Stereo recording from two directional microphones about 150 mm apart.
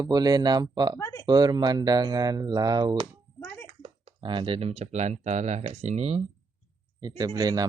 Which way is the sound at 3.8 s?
35° right (ahead or behind).